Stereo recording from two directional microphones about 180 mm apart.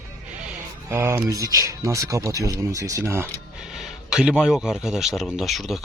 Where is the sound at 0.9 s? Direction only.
15° right (ahead or behind).